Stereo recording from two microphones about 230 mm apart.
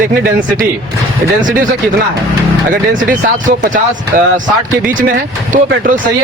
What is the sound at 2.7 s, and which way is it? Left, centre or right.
Speech, right.